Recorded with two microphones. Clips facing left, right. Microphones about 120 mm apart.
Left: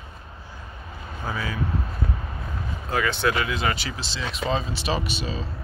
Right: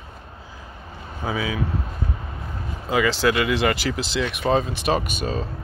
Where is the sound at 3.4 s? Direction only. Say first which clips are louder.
Right 6 dB; 75° right (ahead or behind); by 5.5 s 50° right (ahead or behind).